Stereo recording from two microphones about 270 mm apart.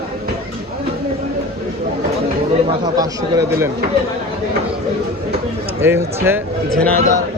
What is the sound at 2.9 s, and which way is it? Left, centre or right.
Speech, centre.